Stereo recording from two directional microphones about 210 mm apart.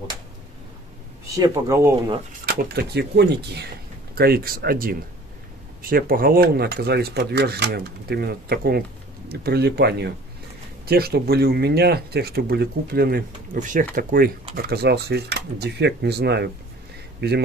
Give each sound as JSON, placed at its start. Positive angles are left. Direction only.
{"t": 1.3, "sound": "speech", "side_deg": -15}
{"t": 2.4, "sound": "speech", "side_deg": -45}